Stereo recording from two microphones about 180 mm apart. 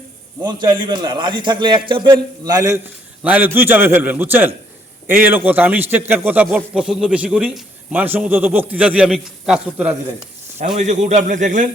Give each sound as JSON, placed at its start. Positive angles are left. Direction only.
{"t": 0.4, "sound": "a man's voice", "side_deg": -25}
{"t": 10.8, "sound": "a man's voice", "side_deg": -40}